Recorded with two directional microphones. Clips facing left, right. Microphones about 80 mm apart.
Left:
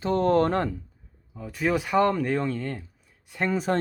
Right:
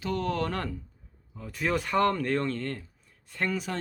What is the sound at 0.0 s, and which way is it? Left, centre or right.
Speech, left.